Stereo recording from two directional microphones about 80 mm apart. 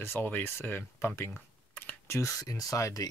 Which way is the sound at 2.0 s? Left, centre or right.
Left.